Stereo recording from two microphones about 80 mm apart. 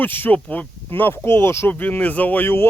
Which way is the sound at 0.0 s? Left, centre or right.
Left.